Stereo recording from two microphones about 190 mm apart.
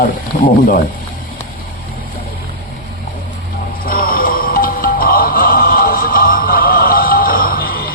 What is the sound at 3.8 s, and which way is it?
Music, 50° left (ahead or behind).